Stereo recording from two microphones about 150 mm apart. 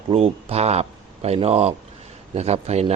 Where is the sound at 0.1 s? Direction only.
40° right (ahead or behind).